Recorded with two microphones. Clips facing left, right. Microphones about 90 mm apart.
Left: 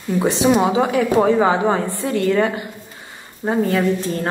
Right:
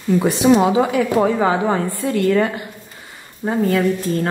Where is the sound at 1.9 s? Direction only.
25° left (ahead or behind).